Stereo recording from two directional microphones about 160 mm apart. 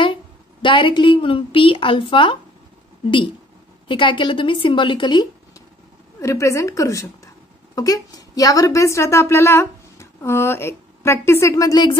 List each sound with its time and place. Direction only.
0.0 s a woman's voice: 30° left (ahead or behind)
3.8 s a woman's voice: 30° left (ahead or behind)